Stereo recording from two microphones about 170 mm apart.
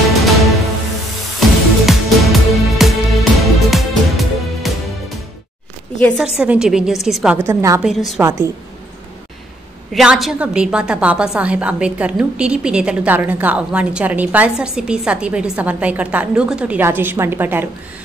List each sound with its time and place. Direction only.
0.1 s music: centre (ahead or behind)
1.9 s music: centre (ahead or behind)
5.9 s a woman's voice: 10° left (ahead or behind)
6.2 s a woman's voice: 5° right (ahead or behind)
7.3 s a woman's voice: 20° right (ahead or behind)
9.9 s a woman's voice: centre (ahead or behind)